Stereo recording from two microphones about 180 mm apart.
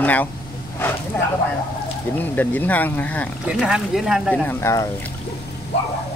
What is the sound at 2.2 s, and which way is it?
Speech, 10° left (ahead or behind).